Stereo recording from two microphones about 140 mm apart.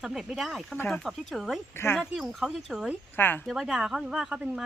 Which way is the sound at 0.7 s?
15° left (ahead or behind).